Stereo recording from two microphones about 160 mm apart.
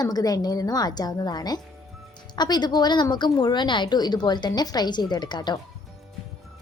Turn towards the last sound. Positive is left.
turn(degrees=25)  # may be behind; listen again after turning